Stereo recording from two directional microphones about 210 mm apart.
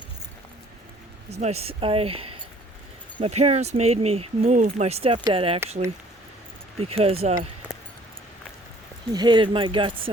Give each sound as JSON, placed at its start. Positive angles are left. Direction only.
{"t": 1.3, "sound": "speech", "side_deg": -30}
{"t": 6.7, "sound": "speech", "side_deg": -30}
{"t": 9.1, "sound": "speech", "side_deg": -20}